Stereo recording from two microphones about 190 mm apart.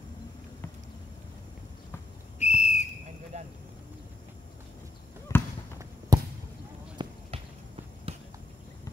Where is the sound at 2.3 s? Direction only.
35° left (ahead or behind).